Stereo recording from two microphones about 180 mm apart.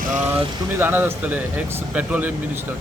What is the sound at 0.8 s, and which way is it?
Speech, 10° right (ahead or behind).